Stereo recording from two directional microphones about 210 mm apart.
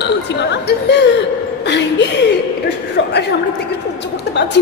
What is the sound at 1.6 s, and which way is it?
Speech, 55° left (ahead or behind).